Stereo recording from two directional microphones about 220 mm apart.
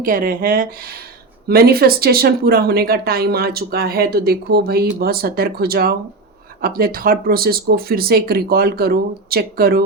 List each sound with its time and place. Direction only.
0.0 s speech: 40° right (ahead or behind)